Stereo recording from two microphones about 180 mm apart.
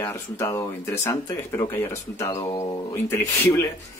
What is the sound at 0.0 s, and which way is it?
Speech, 15° left (ahead or behind).